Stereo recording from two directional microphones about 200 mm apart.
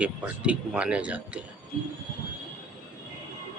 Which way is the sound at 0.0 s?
5° right (ahead or behind).